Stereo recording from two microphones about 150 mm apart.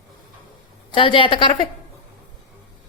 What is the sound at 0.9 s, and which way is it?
Speech, 35° left (ahead or behind).